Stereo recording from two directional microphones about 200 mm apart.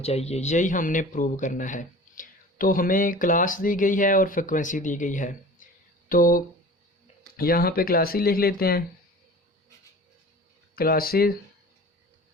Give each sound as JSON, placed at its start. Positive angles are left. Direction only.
{"t": 0.0, "sound": "a man's voice", "side_deg": 30}
{"t": 10.8, "sound": "speech", "side_deg": 50}